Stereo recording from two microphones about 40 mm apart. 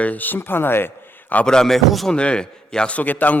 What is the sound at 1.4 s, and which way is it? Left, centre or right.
Speech, centre.